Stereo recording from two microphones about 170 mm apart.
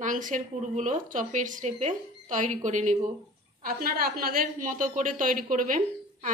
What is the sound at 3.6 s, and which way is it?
A woman's voice, 60° right (ahead or behind).